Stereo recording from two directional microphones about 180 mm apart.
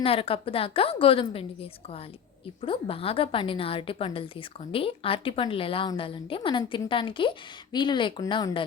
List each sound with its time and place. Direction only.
0.0 s a woman's voice: 30° left (ahead or behind)
2.6 s a woman's voice: 30° left (ahead or behind)